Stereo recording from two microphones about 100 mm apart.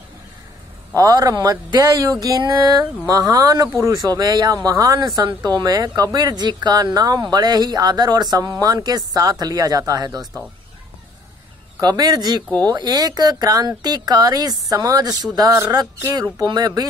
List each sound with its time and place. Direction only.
0.9 s speech: 40° right (ahead or behind)
11.8 s speech: 40° right (ahead or behind)